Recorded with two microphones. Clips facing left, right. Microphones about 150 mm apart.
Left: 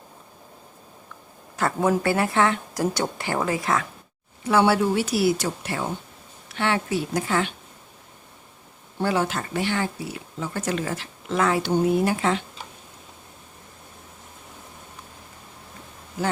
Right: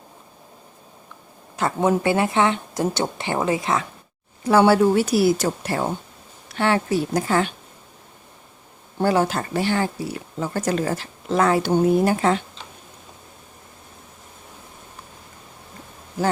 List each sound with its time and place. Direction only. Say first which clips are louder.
1.5 s speech: right 2 dB; 20° right (ahead or behind)
4.4 s a woman's voice: right 4 dB; 40° right (ahead or behind)
9.0 s speech: right 4 dB; 40° right (ahead or behind)